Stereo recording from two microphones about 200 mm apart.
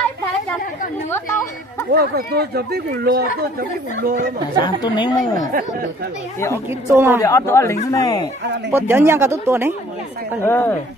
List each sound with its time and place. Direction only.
1.9 s speech: 55° right (ahead or behind)
4.6 s a woman's voice: 20° left (ahead or behind)
6.9 s speech: 15° right (ahead or behind)
7.2 s a man's voice: 15° left (ahead or behind)
8.7 s speech: 10° right (ahead or behind)
10.4 s a man's voice: 10° left (ahead or behind)